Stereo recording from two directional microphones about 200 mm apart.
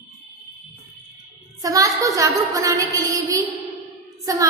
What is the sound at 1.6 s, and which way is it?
A woman's voice, 15° right (ahead or behind).